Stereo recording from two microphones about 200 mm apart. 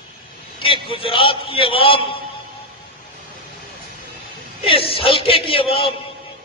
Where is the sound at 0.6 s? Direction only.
25° left (ahead or behind).